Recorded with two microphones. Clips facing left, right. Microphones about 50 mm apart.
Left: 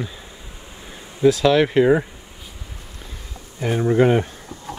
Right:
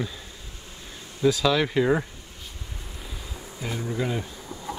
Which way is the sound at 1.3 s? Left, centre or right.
Left.